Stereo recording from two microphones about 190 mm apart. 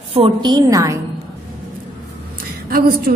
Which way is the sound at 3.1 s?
55° right (ahead or behind).